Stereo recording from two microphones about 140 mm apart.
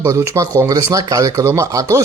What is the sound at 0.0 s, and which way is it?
Speech, 20° right (ahead or behind).